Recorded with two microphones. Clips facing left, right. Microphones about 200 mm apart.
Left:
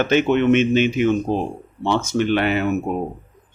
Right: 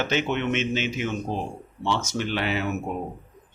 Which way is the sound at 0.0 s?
55° left (ahead or behind).